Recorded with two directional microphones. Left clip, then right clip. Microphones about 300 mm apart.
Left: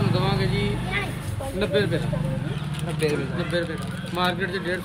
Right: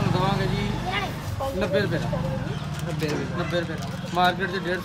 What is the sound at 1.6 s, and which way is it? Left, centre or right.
Speech, centre.